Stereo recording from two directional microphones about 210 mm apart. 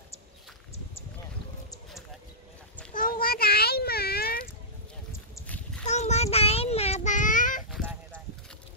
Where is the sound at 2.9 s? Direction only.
40° left (ahead or behind).